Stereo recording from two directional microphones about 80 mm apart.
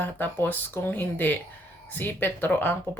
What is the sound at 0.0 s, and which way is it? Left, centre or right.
Speech, left.